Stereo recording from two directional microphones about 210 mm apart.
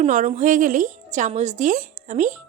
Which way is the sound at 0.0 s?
35° right (ahead or behind).